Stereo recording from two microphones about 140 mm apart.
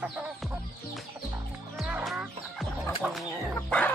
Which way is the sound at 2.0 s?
Centre (ahead or behind).